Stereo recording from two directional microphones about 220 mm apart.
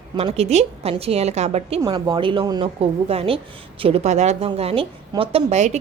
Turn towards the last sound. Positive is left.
turn(degrees=-30)  # may be behind; listen again after turning